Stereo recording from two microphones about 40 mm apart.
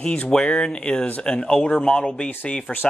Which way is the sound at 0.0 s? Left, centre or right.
Left.